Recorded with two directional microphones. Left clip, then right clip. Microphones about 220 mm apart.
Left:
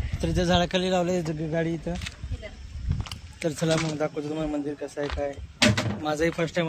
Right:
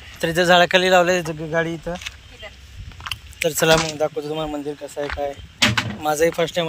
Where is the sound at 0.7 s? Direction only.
15° right (ahead or behind).